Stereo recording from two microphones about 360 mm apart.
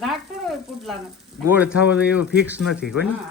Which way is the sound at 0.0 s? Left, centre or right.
Centre.